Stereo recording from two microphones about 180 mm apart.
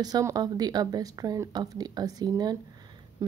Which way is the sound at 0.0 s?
20° right (ahead or behind).